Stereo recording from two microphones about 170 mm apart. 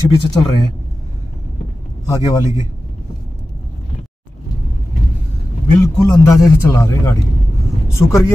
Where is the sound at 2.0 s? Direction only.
20° left (ahead or behind).